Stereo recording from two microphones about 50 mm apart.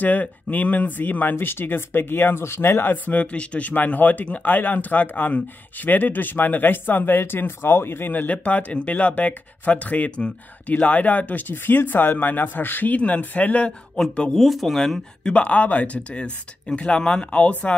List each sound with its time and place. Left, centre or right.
0.0 s speech: left
3.1 s speech: left
8.5 s speech: left
14.0 s speech: centre
14.3 s speech: centre
15.2 s speech: left